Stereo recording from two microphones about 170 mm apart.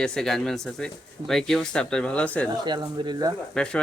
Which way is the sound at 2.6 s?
25° right (ahead or behind).